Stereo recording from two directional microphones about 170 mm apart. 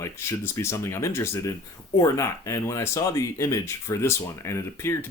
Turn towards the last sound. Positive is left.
turn(degrees=15)  # may be behind; listen again after turning